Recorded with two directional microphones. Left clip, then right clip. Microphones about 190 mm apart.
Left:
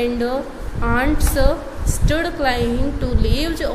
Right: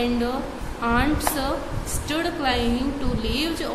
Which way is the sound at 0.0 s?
25° left (ahead or behind).